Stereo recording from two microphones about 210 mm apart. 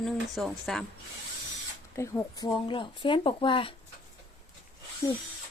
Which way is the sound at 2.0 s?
15° left (ahead or behind).